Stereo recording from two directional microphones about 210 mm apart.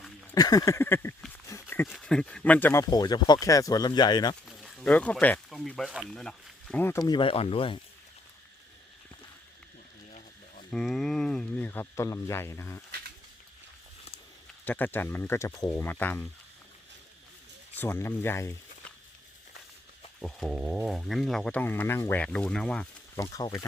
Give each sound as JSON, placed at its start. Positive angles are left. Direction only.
{"t": 0.3, "sound": "a sound", "side_deg": 15}
{"t": 1.7, "sound": "speech", "side_deg": 5}
{"t": 4.4, "sound": "speech", "side_deg": 5}
{"t": 10.1, "sound": "a sound", "side_deg": 30}
{"t": 10.7, "sound": "speech", "side_deg": 0}
{"t": 14.6, "sound": "speech", "side_deg": 10}
{"t": 17.7, "sound": "speech", "side_deg": 10}
{"t": 20.2, "sound": "speech", "side_deg": 0}
{"t": 23.2, "sound": "speech", "side_deg": 15}